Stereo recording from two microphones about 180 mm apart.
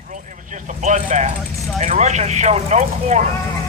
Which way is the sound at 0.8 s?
40° right (ahead or behind).